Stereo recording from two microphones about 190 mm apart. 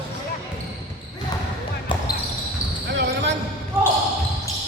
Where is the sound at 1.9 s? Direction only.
25° left (ahead or behind).